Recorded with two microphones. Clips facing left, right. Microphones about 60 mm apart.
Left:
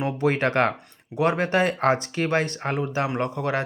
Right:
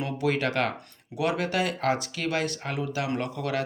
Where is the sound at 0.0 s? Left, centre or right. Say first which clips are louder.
Left 4 dB; left.